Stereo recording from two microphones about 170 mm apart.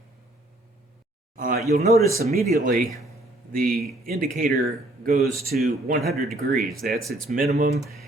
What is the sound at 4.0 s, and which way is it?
Speech, 55° right (ahead or behind).